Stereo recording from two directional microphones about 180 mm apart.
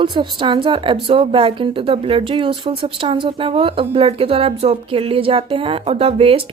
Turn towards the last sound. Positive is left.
turn(degrees=-30)  # may be behind; listen again after turning